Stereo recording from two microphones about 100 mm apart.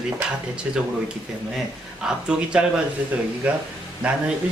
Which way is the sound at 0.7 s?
10° right (ahead or behind).